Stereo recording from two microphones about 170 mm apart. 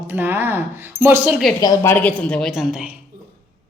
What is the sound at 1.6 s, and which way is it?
A woman's voice, 15° left (ahead or behind).